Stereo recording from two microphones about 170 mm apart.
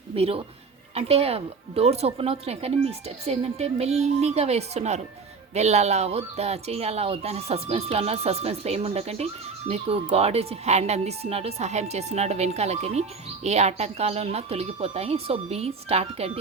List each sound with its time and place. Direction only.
0.1 s speech: 35° right (ahead or behind)